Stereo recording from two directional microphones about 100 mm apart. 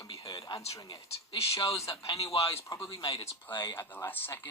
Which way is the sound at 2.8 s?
55° left (ahead or behind).